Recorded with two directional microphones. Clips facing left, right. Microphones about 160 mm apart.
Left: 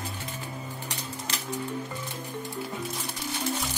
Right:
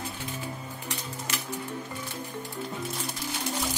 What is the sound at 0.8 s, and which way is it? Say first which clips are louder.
Typewriter: even; 35° left (ahead or behind).